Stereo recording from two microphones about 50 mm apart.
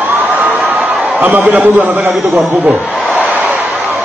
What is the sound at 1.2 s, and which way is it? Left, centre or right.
Speech, right.